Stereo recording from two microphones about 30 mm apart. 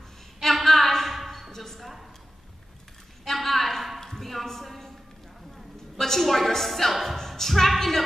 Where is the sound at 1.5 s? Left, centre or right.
Centre.